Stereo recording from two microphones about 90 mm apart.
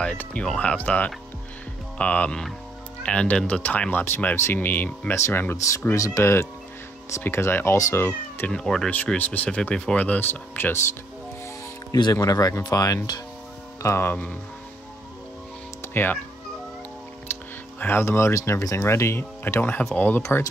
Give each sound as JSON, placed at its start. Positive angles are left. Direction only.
{"t": 0.0, "sound": "speech", "side_deg": 10}
{"t": 8.1, "sound": "speech", "side_deg": 15}
{"t": 8.9, "sound": "speech", "side_deg": 20}
{"t": 12.1, "sound": "speech", "side_deg": 40}
{"t": 13.8, "sound": "speech", "side_deg": 25}
{"t": 15.9, "sound": "speech", "side_deg": 20}
{"t": 17.3, "sound": "speech", "side_deg": 20}